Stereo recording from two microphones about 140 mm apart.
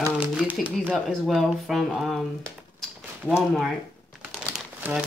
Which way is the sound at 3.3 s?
5° right (ahead or behind).